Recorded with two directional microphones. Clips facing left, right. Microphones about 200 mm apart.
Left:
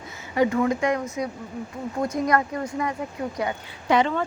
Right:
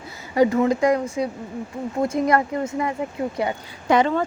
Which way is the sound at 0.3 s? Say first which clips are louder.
Right 4 dB; 35° right (ahead or behind).